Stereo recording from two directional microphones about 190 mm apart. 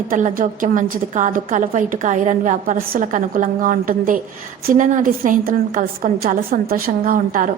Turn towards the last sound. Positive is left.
turn(degrees=-45)  # may be behind; listen again after turning